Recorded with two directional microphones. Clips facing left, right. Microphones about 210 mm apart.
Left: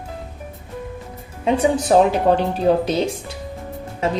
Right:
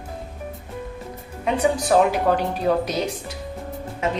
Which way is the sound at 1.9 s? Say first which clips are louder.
Left 4 dB; 25° left (ahead or behind).